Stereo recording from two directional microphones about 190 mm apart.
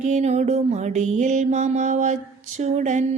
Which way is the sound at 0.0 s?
40° right (ahead or behind).